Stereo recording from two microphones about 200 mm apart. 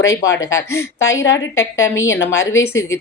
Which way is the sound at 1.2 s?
65° left (ahead or behind).